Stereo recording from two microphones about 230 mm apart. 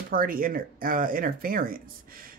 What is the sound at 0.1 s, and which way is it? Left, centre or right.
Speech, right.